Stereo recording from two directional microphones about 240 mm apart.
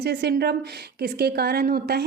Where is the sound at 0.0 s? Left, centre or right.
Right.